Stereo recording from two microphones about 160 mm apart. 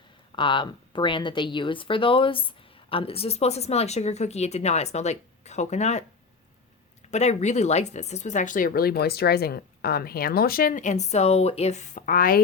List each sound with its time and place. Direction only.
0.3 s speech: 30° left (ahead or behind)
7.1 s speech: 45° left (ahead or behind); by 12.4 s 60° left (ahead or behind)